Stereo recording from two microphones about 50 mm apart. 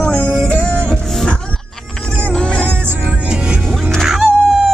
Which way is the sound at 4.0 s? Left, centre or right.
Centre.